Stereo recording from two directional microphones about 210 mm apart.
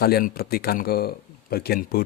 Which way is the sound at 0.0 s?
45° left (ahead or behind).